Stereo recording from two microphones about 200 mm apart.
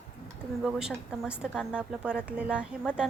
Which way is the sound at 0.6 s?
5° right (ahead or behind).